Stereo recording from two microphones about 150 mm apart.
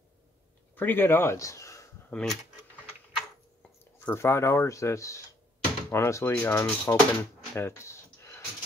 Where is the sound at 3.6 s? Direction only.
10° left (ahead or behind).